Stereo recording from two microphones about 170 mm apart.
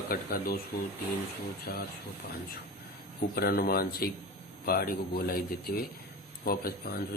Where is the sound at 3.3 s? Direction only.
65° left (ahead or behind).